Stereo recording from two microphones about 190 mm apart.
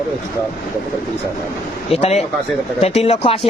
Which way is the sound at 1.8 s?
35° left (ahead or behind).